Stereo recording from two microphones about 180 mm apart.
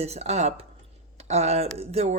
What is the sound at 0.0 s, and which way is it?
Speech, 35° right (ahead or behind).